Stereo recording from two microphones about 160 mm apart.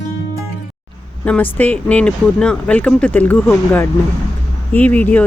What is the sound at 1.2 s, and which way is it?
Speech, 10° left (ahead or behind).